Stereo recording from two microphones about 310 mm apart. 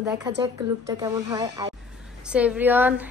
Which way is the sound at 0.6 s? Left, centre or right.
Centre.